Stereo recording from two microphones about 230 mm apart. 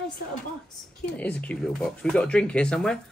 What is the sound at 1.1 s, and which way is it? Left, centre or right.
Speech, centre.